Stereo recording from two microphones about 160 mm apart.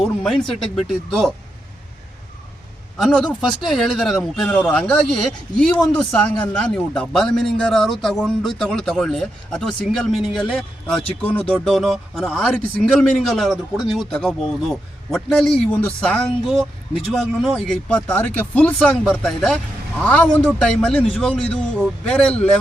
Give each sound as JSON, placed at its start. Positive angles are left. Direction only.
{"t": 0.0, "sound": "speech", "side_deg": 0}
{"t": 3.0, "sound": "speech", "side_deg": 5}